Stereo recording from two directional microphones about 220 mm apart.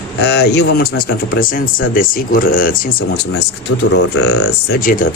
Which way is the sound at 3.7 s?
85° left.